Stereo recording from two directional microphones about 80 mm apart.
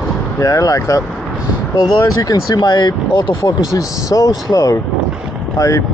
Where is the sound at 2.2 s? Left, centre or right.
Left.